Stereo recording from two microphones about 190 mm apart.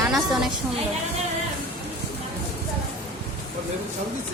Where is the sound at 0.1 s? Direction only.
Centre (ahead or behind).